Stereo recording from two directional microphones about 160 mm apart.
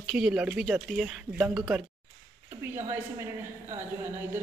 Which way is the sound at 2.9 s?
15° right (ahead or behind).